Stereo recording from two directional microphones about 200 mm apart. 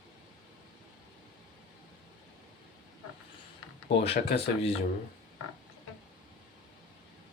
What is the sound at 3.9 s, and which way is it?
Speech, 30° left (ahead or behind).